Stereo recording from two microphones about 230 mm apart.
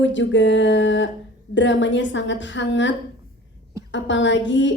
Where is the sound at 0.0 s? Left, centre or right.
Left.